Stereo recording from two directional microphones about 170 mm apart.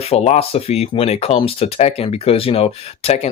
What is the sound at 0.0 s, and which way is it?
Speech, 35° left (ahead or behind).